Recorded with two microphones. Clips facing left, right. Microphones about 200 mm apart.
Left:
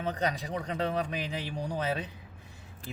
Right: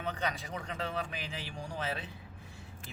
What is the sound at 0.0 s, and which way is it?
Speech, 40° left (ahead or behind).